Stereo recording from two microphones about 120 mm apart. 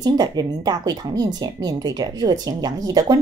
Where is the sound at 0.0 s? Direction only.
35° right (ahead or behind).